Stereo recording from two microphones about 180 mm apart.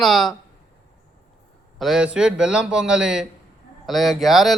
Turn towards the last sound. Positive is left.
turn(degrees=0)  # may be behind; listen again after turning